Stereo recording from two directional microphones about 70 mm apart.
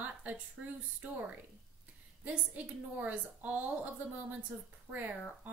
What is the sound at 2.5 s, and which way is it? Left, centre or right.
A woman's voice, right.